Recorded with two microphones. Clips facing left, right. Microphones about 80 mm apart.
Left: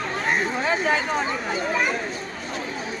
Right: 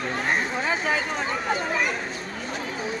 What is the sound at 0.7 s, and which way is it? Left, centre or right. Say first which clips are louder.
Speech: left 3 dB; centre.